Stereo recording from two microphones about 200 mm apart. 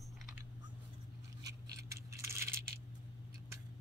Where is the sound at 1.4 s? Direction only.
15° right (ahead or behind).